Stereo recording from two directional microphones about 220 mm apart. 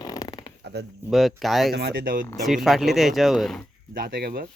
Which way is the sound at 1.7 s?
45° right (ahead or behind).